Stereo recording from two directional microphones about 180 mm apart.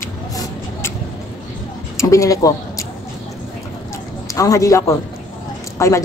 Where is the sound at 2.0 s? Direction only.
15° left (ahead or behind).